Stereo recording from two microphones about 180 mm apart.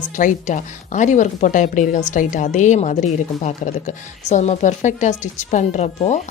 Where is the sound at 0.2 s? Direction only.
45° left (ahead or behind).